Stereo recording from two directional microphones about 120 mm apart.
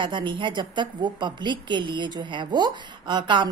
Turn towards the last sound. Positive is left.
turn(degrees=-40)  # may be behind; listen again after turning